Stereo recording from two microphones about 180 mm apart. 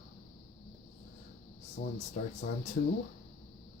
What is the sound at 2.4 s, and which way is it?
Speech, 50° left (ahead or behind).